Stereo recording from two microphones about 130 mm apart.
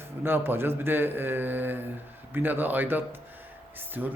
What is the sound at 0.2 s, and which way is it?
Speech, 15° right (ahead or behind).